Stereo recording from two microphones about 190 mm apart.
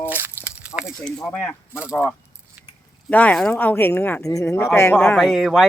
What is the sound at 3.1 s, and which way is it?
Speech, 10° left (ahead or behind).